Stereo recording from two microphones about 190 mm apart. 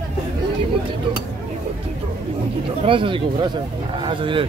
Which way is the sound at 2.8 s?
25° right (ahead or behind).